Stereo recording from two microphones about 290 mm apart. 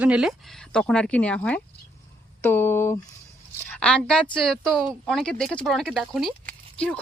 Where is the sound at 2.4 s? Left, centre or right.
Centre.